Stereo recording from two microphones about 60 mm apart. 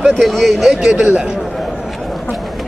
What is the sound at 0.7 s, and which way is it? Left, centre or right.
Speech, centre.